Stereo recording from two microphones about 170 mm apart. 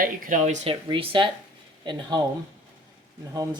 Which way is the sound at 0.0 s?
50° right (ahead or behind).